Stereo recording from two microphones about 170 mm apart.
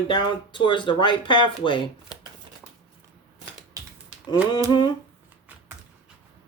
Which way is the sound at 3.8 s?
20° right (ahead or behind).